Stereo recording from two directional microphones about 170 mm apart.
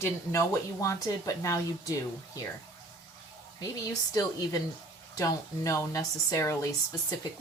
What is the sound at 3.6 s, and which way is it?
Speech, 20° left (ahead or behind).